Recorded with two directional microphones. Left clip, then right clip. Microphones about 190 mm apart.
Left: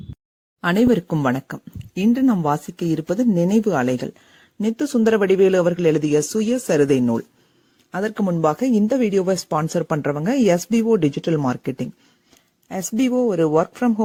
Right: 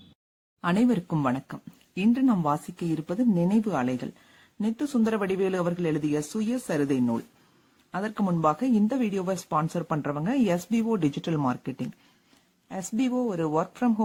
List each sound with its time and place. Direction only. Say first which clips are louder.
0.6 s a man's voice: left 8 dB; 30° left (ahead or behind)